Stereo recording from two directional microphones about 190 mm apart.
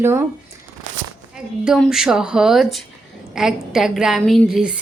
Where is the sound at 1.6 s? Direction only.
5° right (ahead or behind).